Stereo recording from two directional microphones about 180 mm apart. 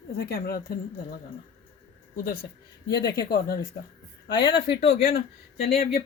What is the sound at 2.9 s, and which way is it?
Speech, 20° left (ahead or behind).